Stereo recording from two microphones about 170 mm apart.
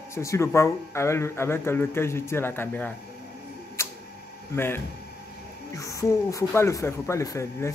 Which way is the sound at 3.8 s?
15° left (ahead or behind).